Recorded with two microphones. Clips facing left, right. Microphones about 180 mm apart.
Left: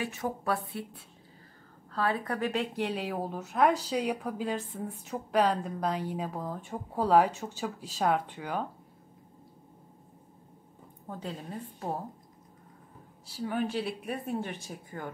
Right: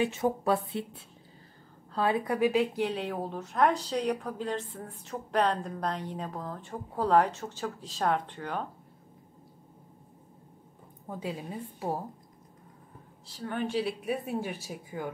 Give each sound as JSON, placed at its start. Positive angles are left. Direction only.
{"t": 0.0, "sound": "a woman's voice", "side_deg": -25}
{"t": 1.9, "sound": "a woman's voice", "side_deg": -20}
{"t": 11.1, "sound": "a woman's voice", "side_deg": -5}
{"t": 13.3, "sound": "speech", "side_deg": 5}